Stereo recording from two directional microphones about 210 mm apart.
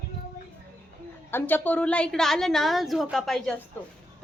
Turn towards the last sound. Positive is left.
turn(degrees=0)  # may be behind; listen again after turning